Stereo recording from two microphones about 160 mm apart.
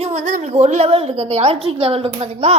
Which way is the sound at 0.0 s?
45° right (ahead or behind).